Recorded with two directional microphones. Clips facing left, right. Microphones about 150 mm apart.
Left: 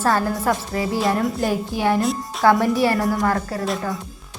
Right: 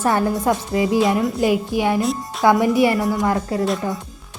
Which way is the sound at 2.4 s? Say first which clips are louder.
Right 2 dB; 15° right (ahead or behind).